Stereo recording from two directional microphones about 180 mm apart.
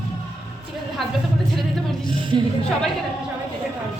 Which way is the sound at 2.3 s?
25° right (ahead or behind).